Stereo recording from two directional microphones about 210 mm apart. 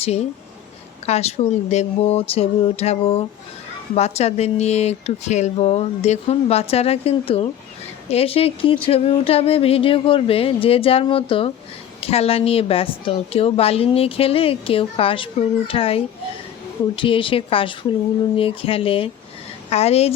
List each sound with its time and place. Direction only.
0.0 s a woman's voice: 30° left (ahead or behind)